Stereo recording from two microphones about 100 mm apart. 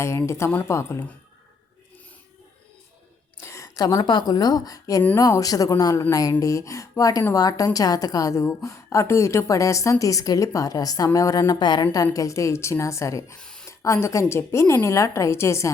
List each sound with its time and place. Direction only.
0.3 s a woman's voice: 25° left (ahead or behind)
3.4 s a woman's voice: 30° left (ahead or behind)
13.4 s a sound: 5° left (ahead or behind)
13.7 s a woman's voice: 30° left (ahead or behind)